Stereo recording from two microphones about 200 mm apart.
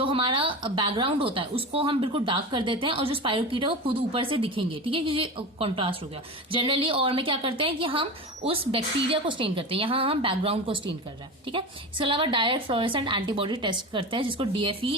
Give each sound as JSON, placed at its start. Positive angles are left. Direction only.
{"t": 0.0, "sound": "a woman's voice", "side_deg": -25}
{"t": 9.0, "sound": "a woman's voice", "side_deg": -25}